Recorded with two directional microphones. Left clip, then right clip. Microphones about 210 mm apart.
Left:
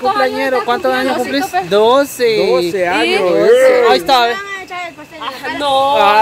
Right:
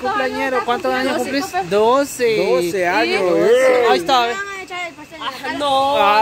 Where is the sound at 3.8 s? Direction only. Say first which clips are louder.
Left 4 dB; 5° left (ahead or behind).